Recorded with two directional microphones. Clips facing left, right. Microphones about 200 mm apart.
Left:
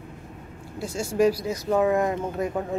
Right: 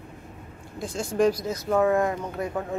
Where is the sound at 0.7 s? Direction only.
10° left (ahead or behind).